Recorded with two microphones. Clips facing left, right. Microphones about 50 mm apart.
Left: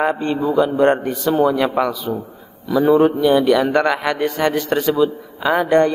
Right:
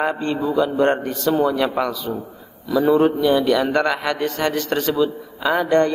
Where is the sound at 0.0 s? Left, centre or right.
Centre.